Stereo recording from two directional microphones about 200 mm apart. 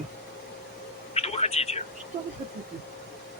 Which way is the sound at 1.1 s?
30° left (ahead or behind).